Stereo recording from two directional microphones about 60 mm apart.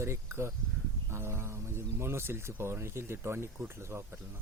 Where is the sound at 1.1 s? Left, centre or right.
Right.